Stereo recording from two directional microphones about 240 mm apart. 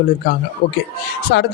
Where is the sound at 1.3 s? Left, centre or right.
Left.